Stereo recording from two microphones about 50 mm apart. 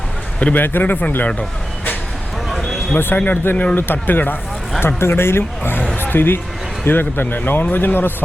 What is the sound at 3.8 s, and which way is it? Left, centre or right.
Speech, left.